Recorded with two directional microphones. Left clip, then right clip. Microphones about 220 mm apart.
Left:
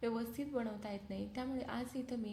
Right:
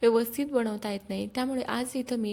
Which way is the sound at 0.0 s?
45° right (ahead or behind).